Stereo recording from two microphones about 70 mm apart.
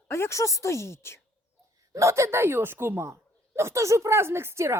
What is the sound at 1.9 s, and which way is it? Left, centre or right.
A woman's voice, right.